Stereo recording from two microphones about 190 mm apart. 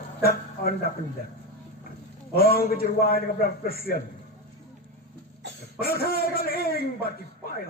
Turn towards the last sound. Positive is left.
turn(degrees=55)  # may be behind; listen again after turning